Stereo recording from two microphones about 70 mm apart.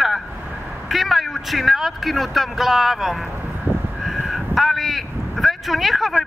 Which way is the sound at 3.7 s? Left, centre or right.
Right.